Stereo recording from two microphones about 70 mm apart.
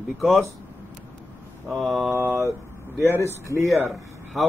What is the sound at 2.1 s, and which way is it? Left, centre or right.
Speech, right.